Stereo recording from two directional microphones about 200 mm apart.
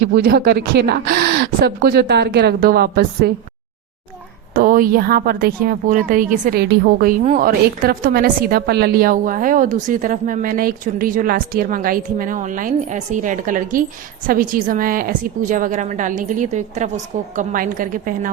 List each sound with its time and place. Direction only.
0.0 s a woman's voice: 50° right (ahead or behind)
4.5 s a woman's voice: 45° right (ahead or behind)